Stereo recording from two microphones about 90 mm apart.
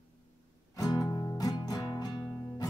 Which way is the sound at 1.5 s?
50° left (ahead or behind).